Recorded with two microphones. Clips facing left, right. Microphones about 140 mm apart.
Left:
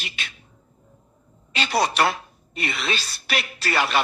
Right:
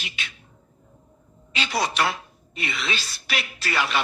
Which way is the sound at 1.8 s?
35° left (ahead or behind).